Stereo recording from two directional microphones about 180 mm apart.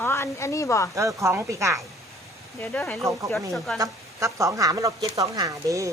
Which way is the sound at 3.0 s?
15° right (ahead or behind).